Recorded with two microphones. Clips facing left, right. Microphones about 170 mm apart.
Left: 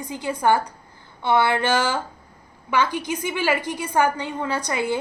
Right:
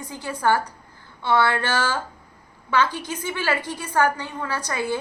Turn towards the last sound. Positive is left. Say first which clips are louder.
# left 2 dB
turn(degrees=15)  # may be behind; listen again after turning